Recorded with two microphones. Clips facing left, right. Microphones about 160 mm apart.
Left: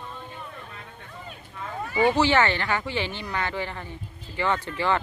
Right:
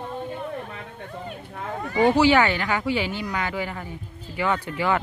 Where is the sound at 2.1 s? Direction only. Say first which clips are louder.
Right 3 dB; 10° right (ahead or behind).